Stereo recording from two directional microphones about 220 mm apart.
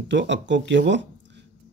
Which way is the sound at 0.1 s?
55° right (ahead or behind).